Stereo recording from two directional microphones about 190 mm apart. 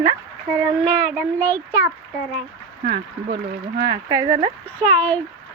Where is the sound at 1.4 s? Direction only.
10° left (ahead or behind).